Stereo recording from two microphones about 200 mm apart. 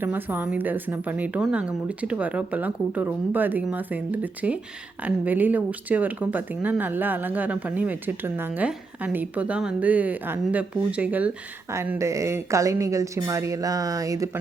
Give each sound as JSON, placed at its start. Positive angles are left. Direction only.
{"t": 0.0, "sound": "speech", "side_deg": -10}